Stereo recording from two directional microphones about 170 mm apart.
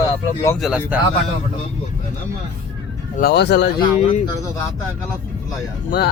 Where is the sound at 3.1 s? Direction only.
70° left (ahead or behind).